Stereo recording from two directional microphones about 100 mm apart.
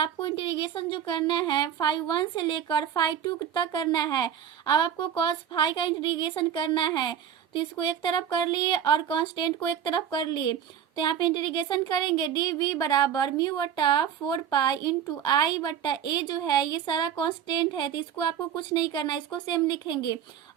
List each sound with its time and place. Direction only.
0.0 s a woman's voice: 60° left (ahead or behind)